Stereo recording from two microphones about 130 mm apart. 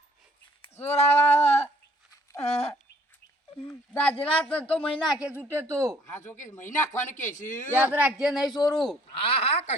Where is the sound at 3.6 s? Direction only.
10° left (ahead or behind).